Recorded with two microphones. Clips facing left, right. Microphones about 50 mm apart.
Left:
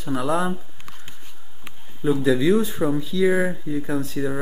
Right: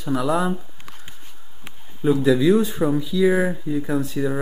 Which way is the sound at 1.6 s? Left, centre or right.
Centre.